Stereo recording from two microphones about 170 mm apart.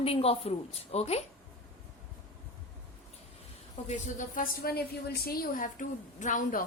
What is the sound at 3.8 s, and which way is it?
A woman's voice, 50° left (ahead or behind).